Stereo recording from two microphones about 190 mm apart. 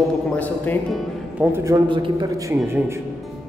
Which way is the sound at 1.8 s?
25° right (ahead or behind).